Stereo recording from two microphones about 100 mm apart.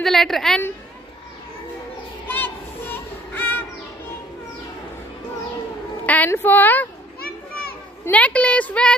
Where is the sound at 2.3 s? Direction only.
20° left (ahead or behind).